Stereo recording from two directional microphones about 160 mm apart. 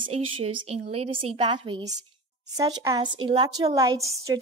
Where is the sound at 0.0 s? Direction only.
35° right (ahead or behind).